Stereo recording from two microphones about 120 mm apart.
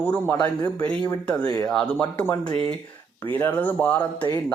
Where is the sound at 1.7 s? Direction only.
5° left (ahead or behind).